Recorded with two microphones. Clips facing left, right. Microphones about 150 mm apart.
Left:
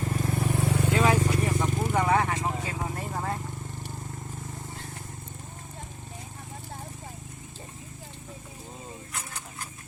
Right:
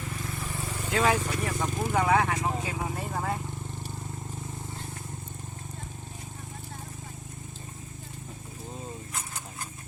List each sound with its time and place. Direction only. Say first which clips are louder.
0.0 s vehicle: left 8 dB; 45° left (ahead or behind); by 0.9 s 60° left (ahead or behind)
0.9 s vehicle: even; 5° left (ahead or behind)